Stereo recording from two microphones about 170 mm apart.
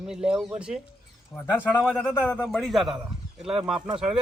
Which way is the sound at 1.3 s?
10° left (ahead or behind).